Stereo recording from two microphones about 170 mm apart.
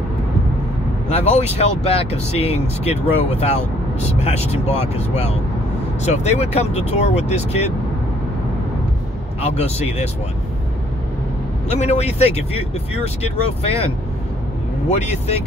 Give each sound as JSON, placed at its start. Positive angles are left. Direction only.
{"t": 1.0, "sound": "speech", "side_deg": 40}
{"t": 9.4, "sound": "speech", "side_deg": 35}
{"t": 11.7, "sound": "speech", "side_deg": 40}